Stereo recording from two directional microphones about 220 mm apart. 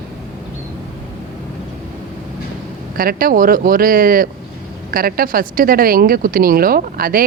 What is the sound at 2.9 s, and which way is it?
A woman's voice, 40° right (ahead or behind).